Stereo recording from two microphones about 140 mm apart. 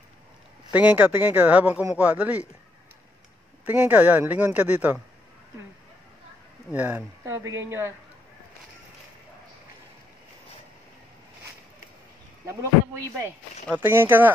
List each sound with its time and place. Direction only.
0.7 s speech: 10° right (ahead or behind)
3.6 s speech: 15° right (ahead or behind)
6.7 s speech: 10° right (ahead or behind)
13.7 s speech: 15° right (ahead or behind)